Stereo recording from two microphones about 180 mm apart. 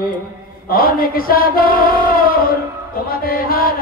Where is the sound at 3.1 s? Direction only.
55° left (ahead or behind).